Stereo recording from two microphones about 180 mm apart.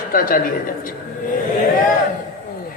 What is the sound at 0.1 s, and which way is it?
Speech, 50° left (ahead or behind).